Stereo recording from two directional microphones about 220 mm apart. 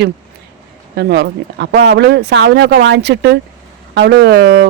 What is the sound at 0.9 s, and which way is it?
A man's voice, 50° right (ahead or behind).